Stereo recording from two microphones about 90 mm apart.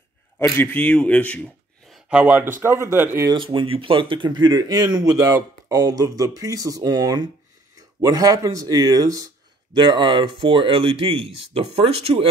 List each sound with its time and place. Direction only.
0.4 s a man's voice: 20° left (ahead or behind)
2.0 s speech: 15° right (ahead or behind)
2.4 s speech: 25° right (ahead or behind)
3.4 s speech: 90° right; by 9.3 s 40° right (ahead or behind)
9.8 s speech: 65° right (ahead or behind); by 12.3 s 90° right